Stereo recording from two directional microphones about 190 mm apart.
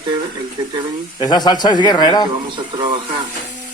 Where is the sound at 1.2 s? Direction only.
20° left (ahead or behind).